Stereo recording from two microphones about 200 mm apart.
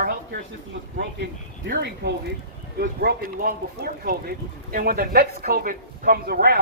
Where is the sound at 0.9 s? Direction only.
50° right (ahead or behind).